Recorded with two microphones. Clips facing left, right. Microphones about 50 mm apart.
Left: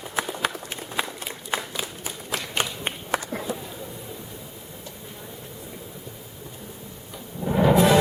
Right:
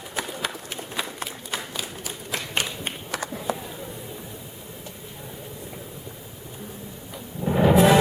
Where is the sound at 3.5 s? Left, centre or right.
Right.